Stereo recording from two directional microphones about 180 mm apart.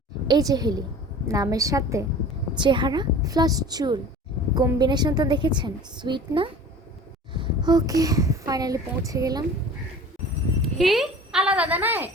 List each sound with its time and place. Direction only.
0.3 s a woman's voice: 20° right (ahead or behind)
10.6 s speech: centre (ahead or behind)